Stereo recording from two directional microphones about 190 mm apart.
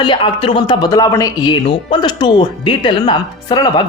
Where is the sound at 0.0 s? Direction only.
25° left (ahead or behind).